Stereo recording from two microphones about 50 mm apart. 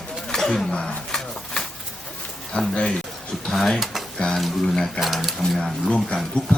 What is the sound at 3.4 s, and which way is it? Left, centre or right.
Speech, centre.